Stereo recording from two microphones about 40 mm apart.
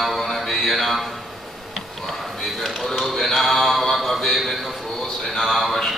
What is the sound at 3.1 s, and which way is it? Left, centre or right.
Mantra, centre.